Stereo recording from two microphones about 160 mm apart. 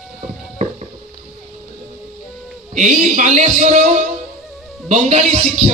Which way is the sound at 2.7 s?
50° right (ahead or behind).